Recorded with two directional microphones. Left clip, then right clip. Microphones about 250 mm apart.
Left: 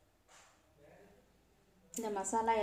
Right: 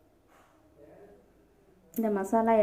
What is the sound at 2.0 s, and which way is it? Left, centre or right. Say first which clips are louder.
Speech: right 7 dB; centre.